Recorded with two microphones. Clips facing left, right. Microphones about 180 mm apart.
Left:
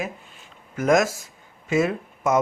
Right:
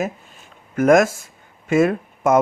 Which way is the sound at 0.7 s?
55° right (ahead or behind).